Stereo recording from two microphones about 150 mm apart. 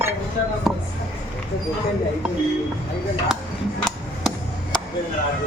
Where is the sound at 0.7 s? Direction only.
Centre (ahead or behind).